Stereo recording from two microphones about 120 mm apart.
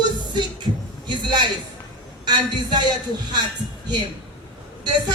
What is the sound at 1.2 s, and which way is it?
Speech, 35° right (ahead or behind).